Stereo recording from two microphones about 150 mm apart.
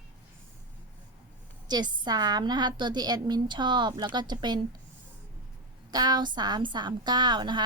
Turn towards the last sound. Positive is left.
turn(degrees=-30)  # may be behind; listen again after turning